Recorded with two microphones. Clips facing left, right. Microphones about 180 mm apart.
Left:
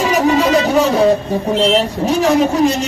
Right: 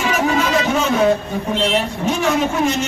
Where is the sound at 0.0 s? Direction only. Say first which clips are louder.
Left 5 dB; 35° left (ahead or behind).